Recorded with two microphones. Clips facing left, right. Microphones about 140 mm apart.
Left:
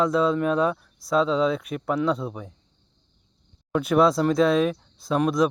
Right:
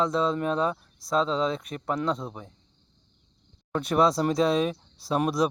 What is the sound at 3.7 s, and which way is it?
Speech, 5° left (ahead or behind).